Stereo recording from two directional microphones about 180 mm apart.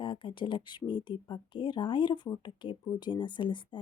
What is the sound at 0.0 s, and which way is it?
Speech, 30° left (ahead or behind).